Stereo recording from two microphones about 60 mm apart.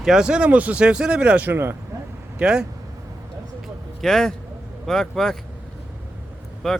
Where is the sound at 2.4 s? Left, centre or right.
Centre.